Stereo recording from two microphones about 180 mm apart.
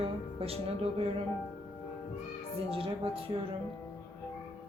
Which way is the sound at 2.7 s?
30° right (ahead or behind).